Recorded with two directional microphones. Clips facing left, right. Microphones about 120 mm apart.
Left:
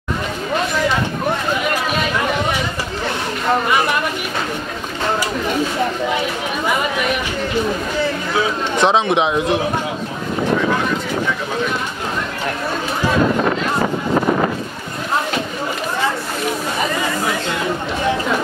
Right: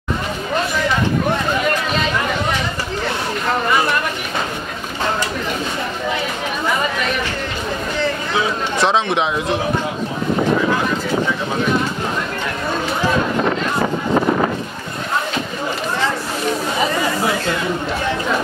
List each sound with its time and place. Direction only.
8.7 s a man's voice: centre (ahead or behind)